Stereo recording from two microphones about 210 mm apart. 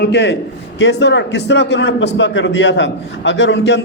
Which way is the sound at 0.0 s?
55° left (ahead or behind).